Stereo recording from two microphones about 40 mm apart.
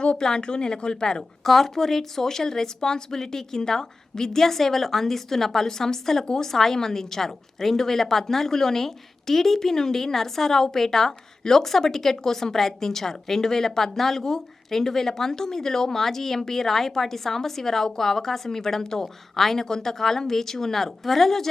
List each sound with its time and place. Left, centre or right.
0.0 s speech: left
1.5 s a woman's voice: centre